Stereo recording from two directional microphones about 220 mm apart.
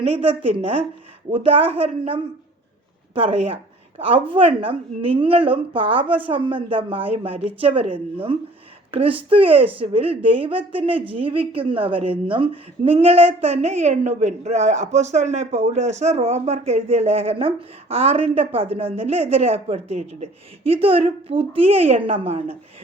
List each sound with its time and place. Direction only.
0.0 s a woman's voice: 25° right (ahead or behind)